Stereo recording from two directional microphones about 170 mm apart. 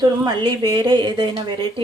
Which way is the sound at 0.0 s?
25° right (ahead or behind).